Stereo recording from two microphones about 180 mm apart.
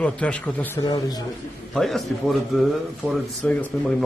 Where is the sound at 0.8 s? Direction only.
20° left (ahead or behind).